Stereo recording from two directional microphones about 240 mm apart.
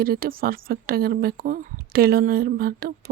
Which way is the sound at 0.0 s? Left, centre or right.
Right.